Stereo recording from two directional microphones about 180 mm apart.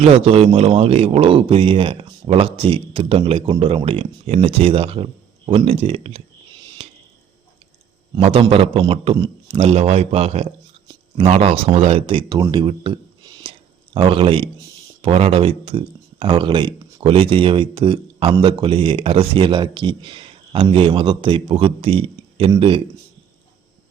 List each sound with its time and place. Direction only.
0.0 s a man's voice: 35° right (ahead or behind)
6.8 s a sound: 35° right (ahead or behind)
8.1 s a man's voice: 30° right (ahead or behind)